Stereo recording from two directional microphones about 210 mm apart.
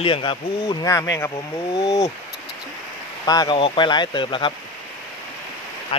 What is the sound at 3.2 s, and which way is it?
Speech, 20° left (ahead or behind).